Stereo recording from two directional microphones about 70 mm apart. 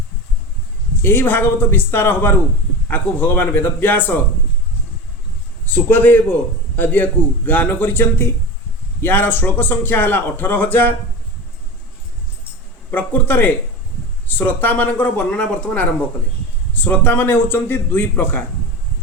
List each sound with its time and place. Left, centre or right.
1.0 s a man's voice: left
5.7 s a man's voice: left
12.9 s a man's voice: left
15.3 s a man's voice: centre; by 18.4 s left